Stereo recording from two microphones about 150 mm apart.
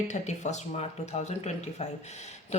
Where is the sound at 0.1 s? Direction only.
50° left (ahead or behind).